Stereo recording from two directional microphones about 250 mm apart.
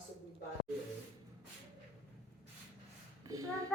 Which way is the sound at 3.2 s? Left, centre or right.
Centre.